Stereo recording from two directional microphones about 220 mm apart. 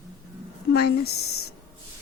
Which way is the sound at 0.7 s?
45° left (ahead or behind).